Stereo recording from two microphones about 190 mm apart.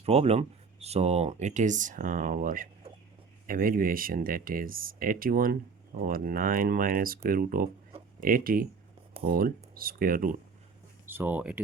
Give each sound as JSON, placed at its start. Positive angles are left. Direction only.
{"t": 0.0, "sound": "speech", "side_deg": -30}
{"t": 11.0, "sound": "speech", "side_deg": -10}